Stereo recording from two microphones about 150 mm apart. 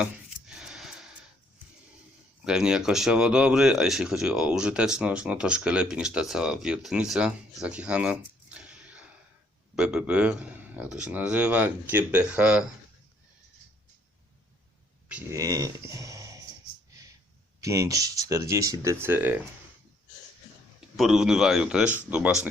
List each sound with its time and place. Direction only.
0.0 s a sound: 5° right (ahead or behind)
2.4 s speech: 5° right (ahead or behind)
15.3 s speech: 25° right (ahead or behind)
15.9 s a sound: 20° right (ahead or behind)
17.6 s speech: 20° right (ahead or behind)
20.9 s speech: centre (ahead or behind)